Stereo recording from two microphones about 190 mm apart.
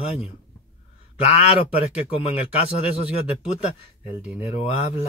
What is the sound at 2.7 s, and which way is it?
Speech, 30° left (ahead or behind).